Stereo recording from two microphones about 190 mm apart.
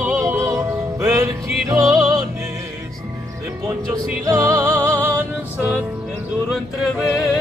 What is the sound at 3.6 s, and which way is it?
Music, 10° right (ahead or behind).